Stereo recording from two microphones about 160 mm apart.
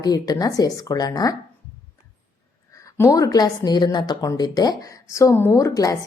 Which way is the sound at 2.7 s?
20° left (ahead or behind).